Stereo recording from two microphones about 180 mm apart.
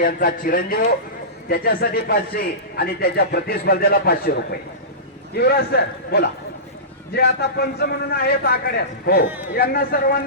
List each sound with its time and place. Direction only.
0.0 s a man's voice: 50° left (ahead or behind)